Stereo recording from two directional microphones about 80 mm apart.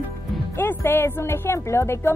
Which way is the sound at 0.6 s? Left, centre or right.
Left.